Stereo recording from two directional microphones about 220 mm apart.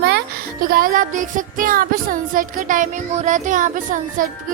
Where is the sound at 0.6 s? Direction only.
40° right (ahead or behind).